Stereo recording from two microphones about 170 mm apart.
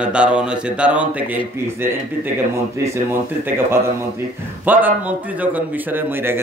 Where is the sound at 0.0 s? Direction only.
5° right (ahead or behind).